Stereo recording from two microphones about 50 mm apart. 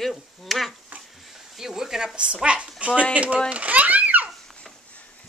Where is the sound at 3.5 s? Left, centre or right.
Right.